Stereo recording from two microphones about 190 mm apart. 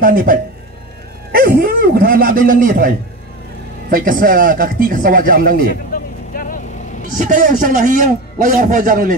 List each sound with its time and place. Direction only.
0.0 s a man's voice: 45° right (ahead or behind)
3.9 s a man's voice: 45° right (ahead or behind)
5.9 s vehicle: 45° left (ahead or behind)
7.2 s a man's voice: 45° right (ahead or behind)